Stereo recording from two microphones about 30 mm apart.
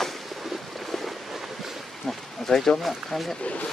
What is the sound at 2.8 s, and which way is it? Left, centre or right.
Speech, centre.